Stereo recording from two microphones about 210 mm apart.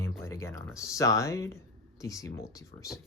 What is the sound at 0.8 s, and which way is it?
Speech, 15° left (ahead or behind).